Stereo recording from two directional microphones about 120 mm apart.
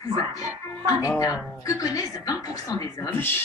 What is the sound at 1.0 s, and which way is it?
A man's voice, 25° left (ahead or behind).